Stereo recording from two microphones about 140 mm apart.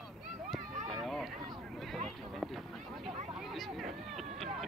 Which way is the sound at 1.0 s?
Centre (ahead or behind).